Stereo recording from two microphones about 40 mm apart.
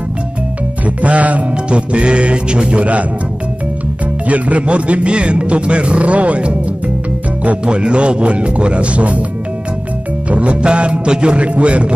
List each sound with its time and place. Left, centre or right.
0.8 s music: right
4.3 s music: right
7.6 s speech: right
10.3 s speech: right